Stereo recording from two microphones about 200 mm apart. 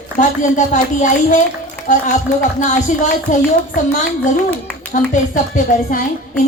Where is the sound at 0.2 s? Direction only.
40° left (ahead or behind).